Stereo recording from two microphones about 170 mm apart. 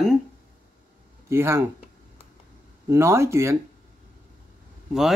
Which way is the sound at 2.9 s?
15° right (ahead or behind).